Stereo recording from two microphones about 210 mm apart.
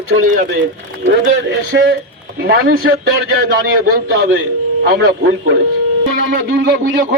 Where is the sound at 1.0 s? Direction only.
60° right (ahead or behind).